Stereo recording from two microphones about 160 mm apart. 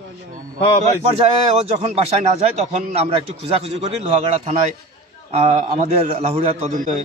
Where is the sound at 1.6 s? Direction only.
40° right (ahead or behind).